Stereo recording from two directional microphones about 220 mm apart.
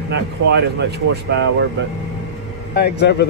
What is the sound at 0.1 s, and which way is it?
Speech, 50° right (ahead or behind).